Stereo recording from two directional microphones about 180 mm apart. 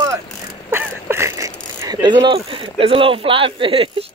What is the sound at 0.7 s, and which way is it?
Speech, 15° right (ahead or behind).